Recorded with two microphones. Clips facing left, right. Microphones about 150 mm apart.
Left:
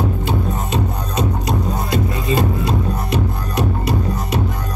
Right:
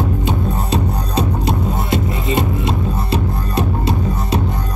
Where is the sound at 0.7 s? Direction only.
30° right (ahead or behind).